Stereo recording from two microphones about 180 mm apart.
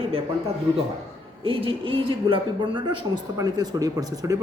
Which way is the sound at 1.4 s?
30° right (ahead or behind).